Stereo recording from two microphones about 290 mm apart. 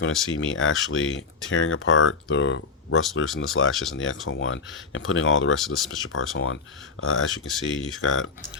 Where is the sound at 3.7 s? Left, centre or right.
Centre.